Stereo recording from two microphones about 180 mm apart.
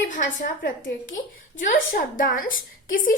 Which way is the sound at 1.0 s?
45° left (ahead or behind).